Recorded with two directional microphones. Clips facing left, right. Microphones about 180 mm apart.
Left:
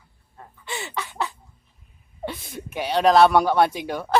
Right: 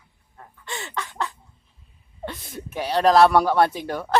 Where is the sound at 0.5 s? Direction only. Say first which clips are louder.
Left 1 dB; 5° left (ahead or behind).